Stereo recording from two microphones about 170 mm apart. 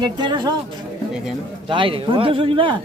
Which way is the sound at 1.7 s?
30° right (ahead or behind).